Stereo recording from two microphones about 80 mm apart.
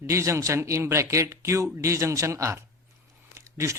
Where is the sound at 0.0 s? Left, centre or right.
Right.